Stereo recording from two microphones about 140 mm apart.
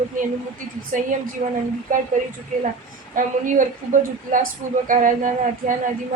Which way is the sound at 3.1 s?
70° right (ahead or behind).